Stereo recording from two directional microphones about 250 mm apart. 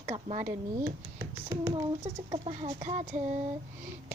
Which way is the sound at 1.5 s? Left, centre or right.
Centre.